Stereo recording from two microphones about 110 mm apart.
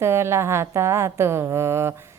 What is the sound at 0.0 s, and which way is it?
Speech, 25° right (ahead or behind).